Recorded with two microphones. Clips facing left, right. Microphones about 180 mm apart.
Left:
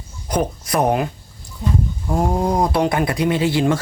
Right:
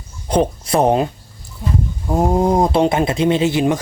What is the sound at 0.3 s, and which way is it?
Speech, 30° right (ahead or behind).